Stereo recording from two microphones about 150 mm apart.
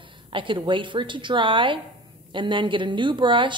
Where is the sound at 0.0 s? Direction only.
35° right (ahead or behind).